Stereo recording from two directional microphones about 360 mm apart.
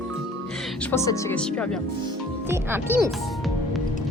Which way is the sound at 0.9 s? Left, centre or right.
Centre.